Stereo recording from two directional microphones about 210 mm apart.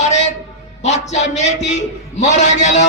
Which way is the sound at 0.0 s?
35° left (ahead or behind).